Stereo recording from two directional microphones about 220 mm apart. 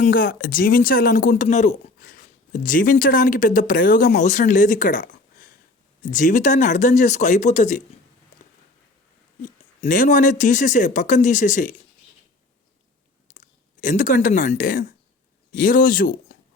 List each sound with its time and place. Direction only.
0.0 s speech: 40° left (ahead or behind)
9.4 s speech: 35° left (ahead or behind)
13.8 s speech: 35° left (ahead or behind)